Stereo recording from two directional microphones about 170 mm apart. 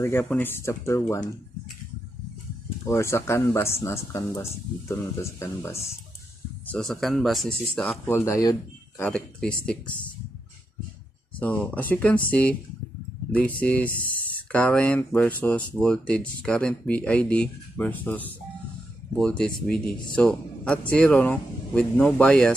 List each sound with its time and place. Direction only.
0.0 s speech: 10° left (ahead or behind)
2.9 s speech: 15° left (ahead or behind)
6.7 s speech: centre (ahead or behind); by 9.1 s 20° left (ahead or behind)
9.1 s speech: 5° left (ahead or behind)
11.3 s a man's voice: 10° left (ahead or behind)